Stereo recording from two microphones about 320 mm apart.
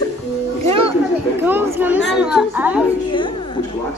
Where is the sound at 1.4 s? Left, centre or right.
Centre.